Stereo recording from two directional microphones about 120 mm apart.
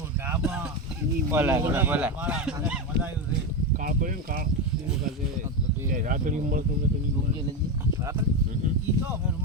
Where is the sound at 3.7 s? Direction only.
90° right.